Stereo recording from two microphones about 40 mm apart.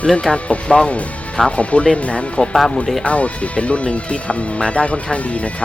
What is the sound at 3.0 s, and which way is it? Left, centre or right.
Speech, left.